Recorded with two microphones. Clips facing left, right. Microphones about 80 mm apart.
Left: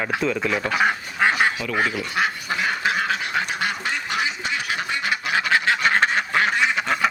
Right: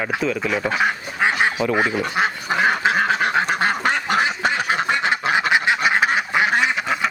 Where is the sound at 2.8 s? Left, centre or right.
Right.